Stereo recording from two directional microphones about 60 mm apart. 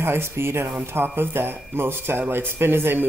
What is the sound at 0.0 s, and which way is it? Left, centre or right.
Speech, right.